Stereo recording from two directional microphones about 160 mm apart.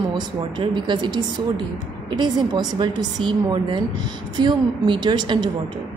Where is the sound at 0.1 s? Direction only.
30° right (ahead or behind).